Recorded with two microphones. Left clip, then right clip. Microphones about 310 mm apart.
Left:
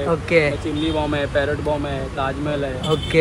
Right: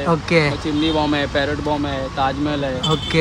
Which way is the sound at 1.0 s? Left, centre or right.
Right.